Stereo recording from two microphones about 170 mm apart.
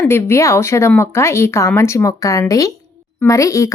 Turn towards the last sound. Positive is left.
turn(degrees=20)  # may be behind; listen again after turning